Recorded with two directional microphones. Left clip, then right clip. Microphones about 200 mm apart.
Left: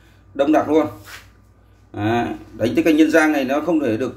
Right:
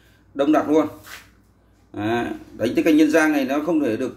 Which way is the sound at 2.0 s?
Centre (ahead or behind).